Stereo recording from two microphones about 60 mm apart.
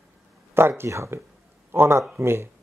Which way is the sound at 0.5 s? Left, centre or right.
Right.